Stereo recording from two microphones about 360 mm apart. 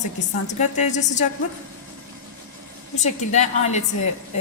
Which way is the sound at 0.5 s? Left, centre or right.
Centre.